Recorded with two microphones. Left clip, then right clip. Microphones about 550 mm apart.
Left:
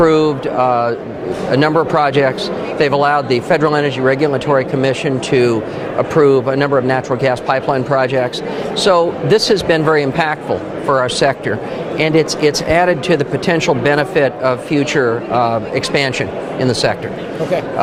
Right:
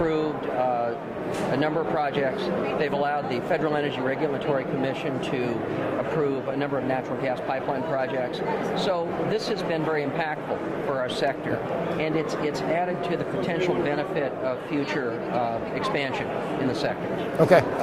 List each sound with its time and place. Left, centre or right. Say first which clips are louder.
0.0 s speech: left 13 dB; left